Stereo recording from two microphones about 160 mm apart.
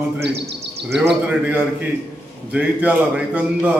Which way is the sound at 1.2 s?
10° right (ahead or behind).